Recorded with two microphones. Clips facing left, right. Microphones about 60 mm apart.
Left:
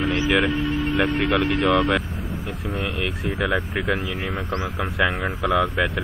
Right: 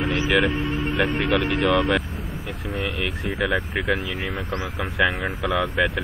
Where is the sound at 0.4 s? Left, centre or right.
Right.